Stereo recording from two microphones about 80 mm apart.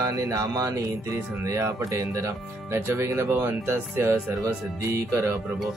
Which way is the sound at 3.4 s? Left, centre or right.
Right.